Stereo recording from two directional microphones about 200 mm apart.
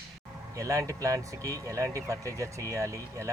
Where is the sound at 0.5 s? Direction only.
15° right (ahead or behind).